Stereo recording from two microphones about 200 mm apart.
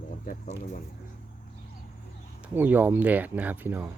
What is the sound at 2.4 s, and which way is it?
Speech, 10° right (ahead or behind).